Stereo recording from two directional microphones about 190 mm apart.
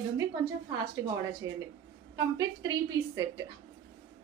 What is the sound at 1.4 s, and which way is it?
A woman's voice, 15° right (ahead or behind).